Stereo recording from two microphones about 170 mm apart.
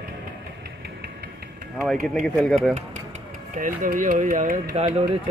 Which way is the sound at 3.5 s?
55° right (ahead or behind).